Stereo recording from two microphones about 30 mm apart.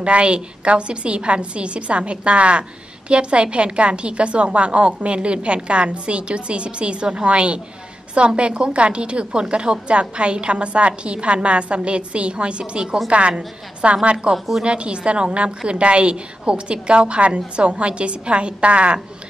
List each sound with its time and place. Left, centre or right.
0.0 s a woman's voice: right